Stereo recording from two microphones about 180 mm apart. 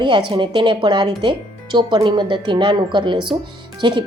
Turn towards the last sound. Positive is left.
turn(degrees=-25)  # may be behind; listen again after turning